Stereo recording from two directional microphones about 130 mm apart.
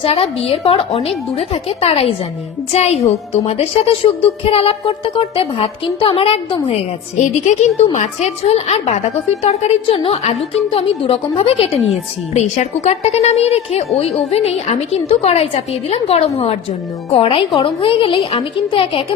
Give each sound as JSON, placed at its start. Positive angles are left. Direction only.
{"t": 0.0, "sound": "a woman's voice", "side_deg": 45}
{"t": 7.2, "sound": "a woman's voice", "side_deg": 65}
{"t": 12.3, "sound": "a woman's voice", "side_deg": 60}